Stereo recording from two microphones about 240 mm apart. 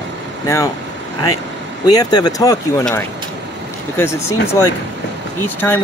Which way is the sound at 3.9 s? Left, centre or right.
Centre.